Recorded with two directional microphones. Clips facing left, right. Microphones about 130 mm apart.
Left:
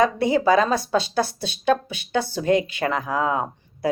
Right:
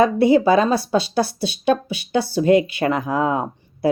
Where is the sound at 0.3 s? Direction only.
10° right (ahead or behind).